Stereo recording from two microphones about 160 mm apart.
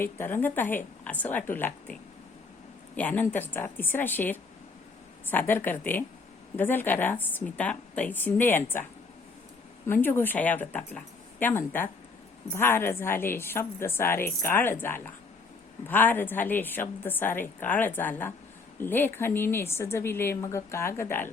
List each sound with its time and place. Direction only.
0.0 s a woman's voice: 15° left (ahead or behind)
9.8 s a woman's voice: 15° left (ahead or behind)